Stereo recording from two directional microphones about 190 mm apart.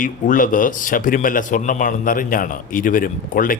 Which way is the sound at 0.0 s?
45° left (ahead or behind).